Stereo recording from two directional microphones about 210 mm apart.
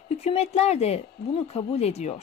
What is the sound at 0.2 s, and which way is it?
Speech, 30° left (ahead or behind).